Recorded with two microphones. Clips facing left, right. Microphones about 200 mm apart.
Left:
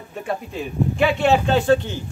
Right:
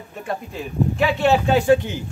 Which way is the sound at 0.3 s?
Centre (ahead or behind).